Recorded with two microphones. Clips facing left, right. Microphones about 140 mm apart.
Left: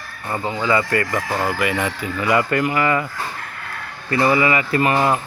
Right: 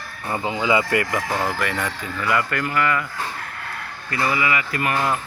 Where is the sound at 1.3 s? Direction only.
5° left (ahead or behind); by 3.1 s 25° left (ahead or behind).